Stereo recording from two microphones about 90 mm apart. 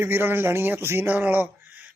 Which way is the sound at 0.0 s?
25° right (ahead or behind).